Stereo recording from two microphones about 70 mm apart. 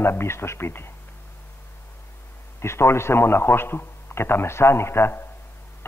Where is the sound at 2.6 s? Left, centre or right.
Left.